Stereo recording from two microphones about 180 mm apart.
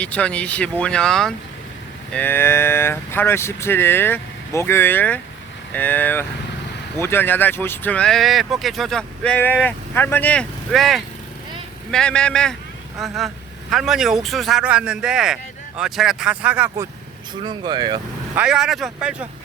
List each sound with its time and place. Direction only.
0.0 s speech: 5° left (ahead or behind); by 16.9 s 15° right (ahead or behind)
17.4 s speech: 25° right (ahead or behind)
18.3 s speech: 5° right (ahead or behind)